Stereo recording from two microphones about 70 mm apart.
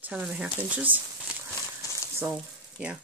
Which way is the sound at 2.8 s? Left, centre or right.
Right.